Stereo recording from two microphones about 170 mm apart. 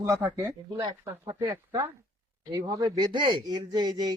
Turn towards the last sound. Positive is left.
turn(degrees=-25)  # may be behind; listen again after turning